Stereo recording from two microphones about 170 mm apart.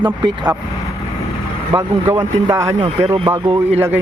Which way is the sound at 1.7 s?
15° right (ahead or behind).